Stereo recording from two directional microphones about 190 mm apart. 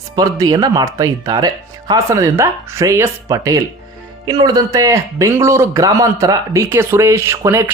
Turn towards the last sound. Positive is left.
turn(degrees=-15)  # may be behind; listen again after turning